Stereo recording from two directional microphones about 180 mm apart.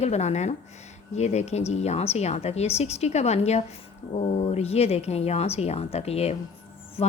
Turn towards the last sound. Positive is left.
turn(degrees=35)  # may be behind; listen again after turning